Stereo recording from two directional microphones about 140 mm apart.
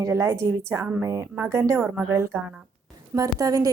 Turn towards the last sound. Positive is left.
turn(degrees=-25)  # may be behind; listen again after turning